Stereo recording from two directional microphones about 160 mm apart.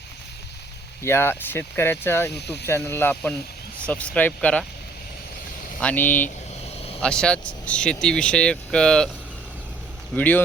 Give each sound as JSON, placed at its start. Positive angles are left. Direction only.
{"t": 1.0, "sound": "speech", "side_deg": 15}
{"t": 2.3, "sound": "speech", "side_deg": 90}
{"t": 2.6, "sound": "speech", "side_deg": 15}
{"t": 5.8, "sound": "speech", "side_deg": 10}
{"t": 6.7, "sound": "vehicle", "side_deg": 40}
{"t": 7.0, "sound": "speech", "side_deg": 5}
{"t": 10.2, "sound": "speech", "side_deg": 10}